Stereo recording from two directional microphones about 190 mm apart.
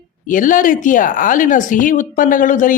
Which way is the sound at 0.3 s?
45° left (ahead or behind).